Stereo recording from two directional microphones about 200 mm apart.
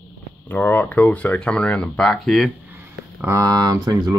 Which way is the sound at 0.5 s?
10° left (ahead or behind).